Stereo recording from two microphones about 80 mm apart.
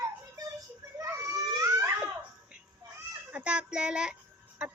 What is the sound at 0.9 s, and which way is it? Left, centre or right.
Baby cry, right.